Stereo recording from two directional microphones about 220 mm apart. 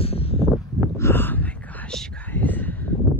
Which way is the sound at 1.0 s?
10° left (ahead or behind).